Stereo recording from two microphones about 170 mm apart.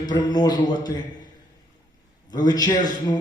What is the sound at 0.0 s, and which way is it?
Speech, 25° left (ahead or behind).